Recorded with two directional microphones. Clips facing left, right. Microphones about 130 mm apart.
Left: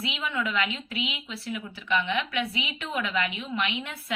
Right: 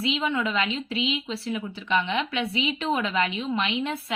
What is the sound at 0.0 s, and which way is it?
Speech, 30° right (ahead or behind).